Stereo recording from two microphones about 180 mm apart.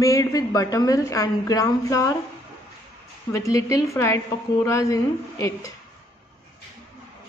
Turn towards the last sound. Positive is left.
turn(degrees=15)  # may be behind; listen again after turning